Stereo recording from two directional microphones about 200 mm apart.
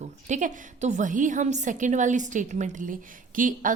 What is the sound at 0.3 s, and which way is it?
A woman's voice, 40° right (ahead or behind).